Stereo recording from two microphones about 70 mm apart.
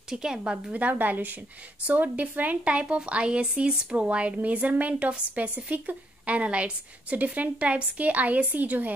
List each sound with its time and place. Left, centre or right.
0.1 s a woman's voice: centre; by 8.9 s right